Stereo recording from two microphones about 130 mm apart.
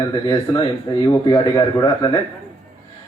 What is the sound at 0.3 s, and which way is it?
A man's voice, 35° left (ahead or behind).